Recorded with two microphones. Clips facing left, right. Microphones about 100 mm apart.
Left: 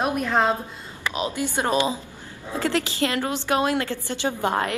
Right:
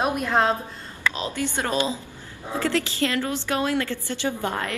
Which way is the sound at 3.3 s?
20° left (ahead or behind).